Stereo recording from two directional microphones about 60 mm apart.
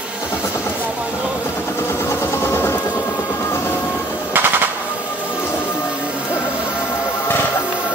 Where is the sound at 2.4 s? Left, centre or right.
Left.